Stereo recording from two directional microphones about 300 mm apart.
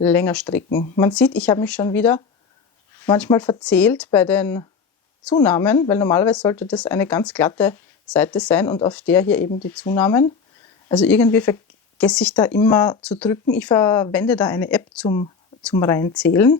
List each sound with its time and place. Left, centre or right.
0.0 s speech: centre